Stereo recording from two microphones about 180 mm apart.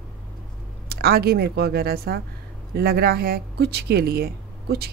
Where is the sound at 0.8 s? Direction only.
60° right (ahead or behind).